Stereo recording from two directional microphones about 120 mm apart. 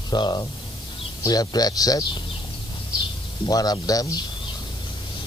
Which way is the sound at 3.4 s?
35° left (ahead or behind).